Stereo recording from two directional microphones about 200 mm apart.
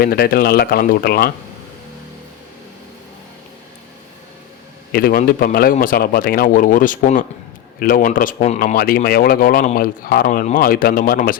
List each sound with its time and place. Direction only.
0.0 s speech: 50° left (ahead or behind)
4.9 s speech: 50° left (ahead or behind)